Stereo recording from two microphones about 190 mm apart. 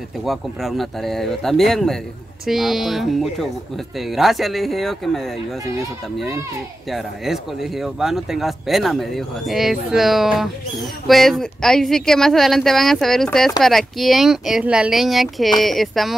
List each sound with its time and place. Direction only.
0.2 s speech: centre (ahead or behind)
6.9 s speech: centre (ahead or behind)